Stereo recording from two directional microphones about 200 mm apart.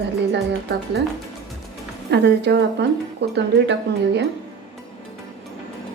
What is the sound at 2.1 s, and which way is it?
A woman's voice, 55° right (ahead or behind).